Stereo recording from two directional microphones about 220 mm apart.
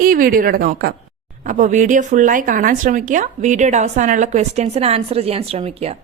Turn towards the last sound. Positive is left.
turn(degrees=-30)  # may be behind; listen again after turning